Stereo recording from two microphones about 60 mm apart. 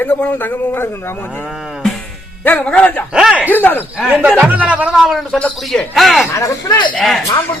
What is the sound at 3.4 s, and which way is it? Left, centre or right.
Speech, left.